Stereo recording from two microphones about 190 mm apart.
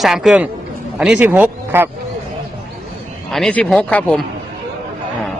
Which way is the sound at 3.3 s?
5° left (ahead or behind).